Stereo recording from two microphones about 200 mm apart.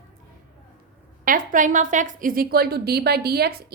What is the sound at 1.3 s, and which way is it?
A woman's voice, 40° right (ahead or behind).